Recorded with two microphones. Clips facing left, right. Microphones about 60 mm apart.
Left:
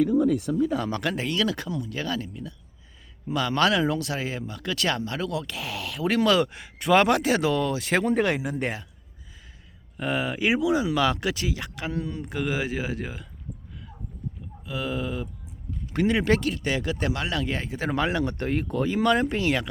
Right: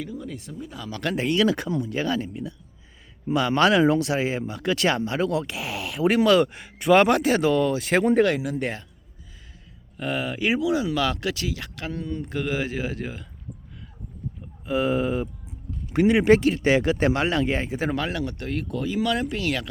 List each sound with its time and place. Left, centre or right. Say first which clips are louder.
0.0 s speech: left 13 dB; left
1.0 s speech: right 4 dB; centre; by 2.0 s right
2.0 s speech: right 4 dB; centre
3.3 s speech: right 3 dB; centre
3.8 s speech: right 6 dB; right
5.5 s speech: right 2 dB; centre
8.2 s speech: right 3 dB; centre
10.0 s speech: even; centre
14.7 s speech: right 7 dB; right
15.9 s speech: right 5 dB; centre
16.5 s speech: right 7 dB; right; by 17.9 s centre
17.9 s speech: left 2 dB; centre
18.2 s speech: left 2 dB; left